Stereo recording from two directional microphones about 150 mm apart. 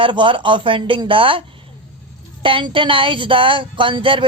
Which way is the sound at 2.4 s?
35° right (ahead or behind).